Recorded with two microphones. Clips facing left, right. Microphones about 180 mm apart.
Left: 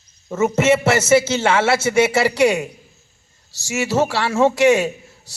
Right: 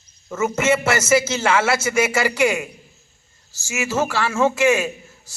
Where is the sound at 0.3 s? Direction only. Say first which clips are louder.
Left 3 dB; 35° left (ahead or behind).